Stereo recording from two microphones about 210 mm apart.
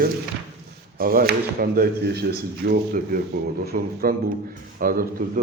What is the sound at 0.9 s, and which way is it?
A man's voice, 45° right (ahead or behind).